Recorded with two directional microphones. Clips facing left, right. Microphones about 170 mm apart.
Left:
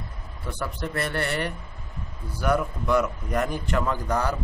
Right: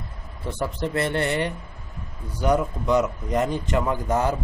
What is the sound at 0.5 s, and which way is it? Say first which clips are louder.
A man's voice: right 4 dB; 25° right (ahead or behind).